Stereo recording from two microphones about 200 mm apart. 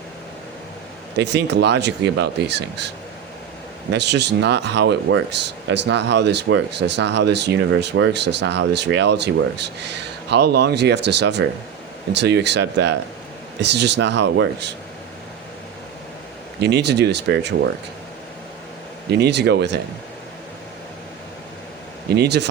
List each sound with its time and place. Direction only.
1.1 s speech: 60° right (ahead or behind)
3.9 s speech: 60° right (ahead or behind)
16.6 s speech: 55° right (ahead or behind)
19.1 s speech: 55° right (ahead or behind)
22.1 s speech: 55° right (ahead or behind)